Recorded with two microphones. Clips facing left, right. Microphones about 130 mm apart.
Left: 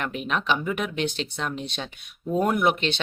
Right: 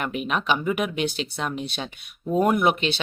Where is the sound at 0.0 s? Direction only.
10° right (ahead or behind).